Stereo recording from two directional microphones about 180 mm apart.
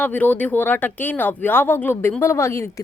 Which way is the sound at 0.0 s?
10° left (ahead or behind).